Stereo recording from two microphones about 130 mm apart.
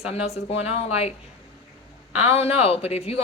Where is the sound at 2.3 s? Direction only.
50° left (ahead or behind).